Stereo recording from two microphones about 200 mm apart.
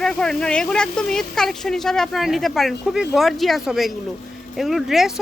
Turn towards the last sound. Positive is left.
turn(degrees=0)  # may be behind; listen again after turning